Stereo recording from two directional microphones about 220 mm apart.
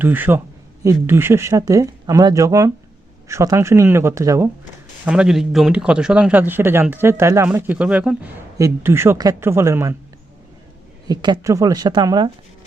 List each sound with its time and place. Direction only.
0.0 s a man's voice: 10° right (ahead or behind)
11.1 s a man's voice: 20° right (ahead or behind)